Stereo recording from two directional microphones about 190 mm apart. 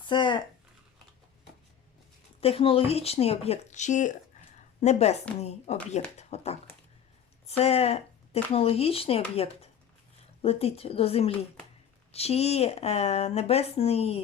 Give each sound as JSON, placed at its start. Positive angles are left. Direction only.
{"t": 0.1, "sound": "speech", "side_deg": 25}
{"t": 2.4, "sound": "speech", "side_deg": 30}